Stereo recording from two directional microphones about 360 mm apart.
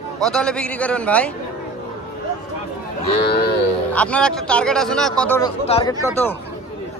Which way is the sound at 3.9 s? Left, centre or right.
Centre.